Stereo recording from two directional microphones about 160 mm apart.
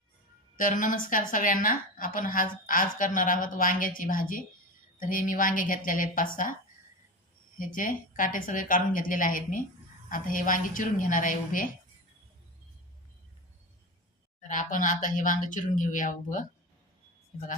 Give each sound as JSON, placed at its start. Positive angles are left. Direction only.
{"t": 0.5, "sound": "a woman's voice", "side_deg": 55}
{"t": 7.6, "sound": "a woman's voice", "side_deg": 60}
{"t": 14.4, "sound": "speech", "side_deg": 55}